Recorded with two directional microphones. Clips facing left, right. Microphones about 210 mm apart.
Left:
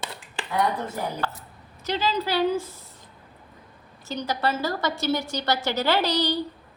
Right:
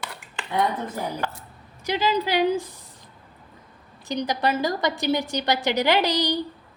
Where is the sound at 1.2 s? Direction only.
25° right (ahead or behind).